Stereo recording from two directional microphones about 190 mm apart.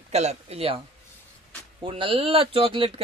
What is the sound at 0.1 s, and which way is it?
Speech, 35° right (ahead or behind).